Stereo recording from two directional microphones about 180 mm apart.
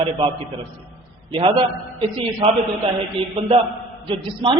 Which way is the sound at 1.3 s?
30° right (ahead or behind).